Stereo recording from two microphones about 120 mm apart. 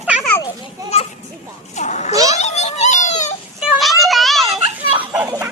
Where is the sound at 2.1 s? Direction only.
30° right (ahead or behind).